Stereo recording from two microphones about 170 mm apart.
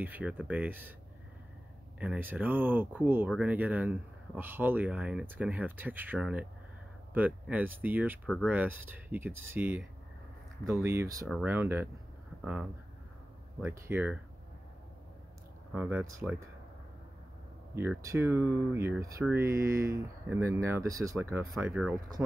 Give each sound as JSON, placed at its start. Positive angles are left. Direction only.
{"t": 0.0, "sound": "speech", "side_deg": -10}
{"t": 2.0, "sound": "speech", "side_deg": -10}
{"t": 11.2, "sound": "speech", "side_deg": -5}
{"t": 13.6, "sound": "speech", "side_deg": -10}
{"t": 15.7, "sound": "speech", "side_deg": -10}
{"t": 17.7, "sound": "speech", "side_deg": -15}